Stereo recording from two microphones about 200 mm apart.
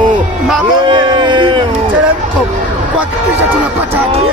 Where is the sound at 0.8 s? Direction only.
25° right (ahead or behind).